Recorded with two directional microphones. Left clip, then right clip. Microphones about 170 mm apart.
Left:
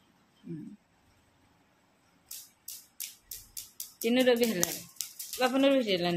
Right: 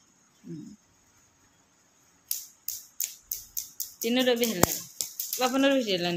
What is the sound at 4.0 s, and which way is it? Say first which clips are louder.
Speech: even; 5° left (ahead or behind).